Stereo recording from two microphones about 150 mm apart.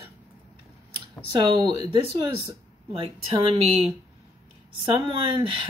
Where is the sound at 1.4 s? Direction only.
30° right (ahead or behind).